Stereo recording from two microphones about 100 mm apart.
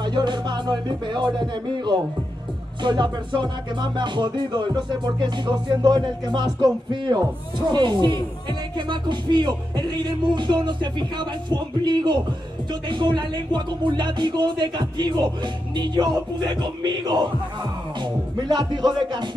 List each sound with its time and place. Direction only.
0.0 s music: 50° right (ahead or behind)